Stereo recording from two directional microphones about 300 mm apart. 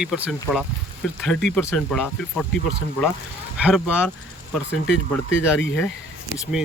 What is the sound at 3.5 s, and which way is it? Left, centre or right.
Speech, centre.